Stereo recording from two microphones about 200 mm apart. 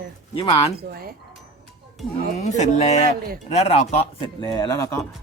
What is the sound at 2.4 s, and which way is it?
A man's voice, 35° left (ahead or behind).